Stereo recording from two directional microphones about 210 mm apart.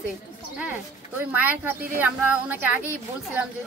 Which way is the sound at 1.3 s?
5° right (ahead or behind).